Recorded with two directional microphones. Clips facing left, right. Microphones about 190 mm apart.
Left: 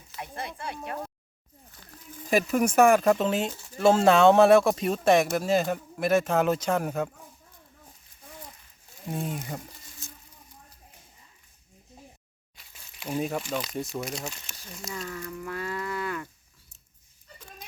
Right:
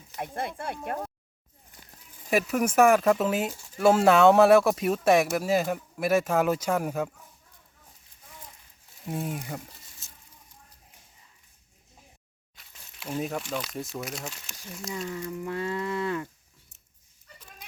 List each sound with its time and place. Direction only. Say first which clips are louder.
0.2 s speech: right 4 dB; 50° right (ahead or behind)
2.2 s speech: left 1 dB; 5° right (ahead or behind)
9.0 s speech: even; 5° right (ahead or behind)
12.7 s speech: left 2 dB; 5° left (ahead or behind)
14.8 s speech: right 3 dB; 20° right (ahead or behind)